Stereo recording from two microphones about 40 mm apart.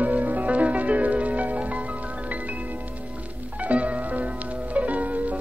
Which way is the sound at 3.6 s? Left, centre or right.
Right.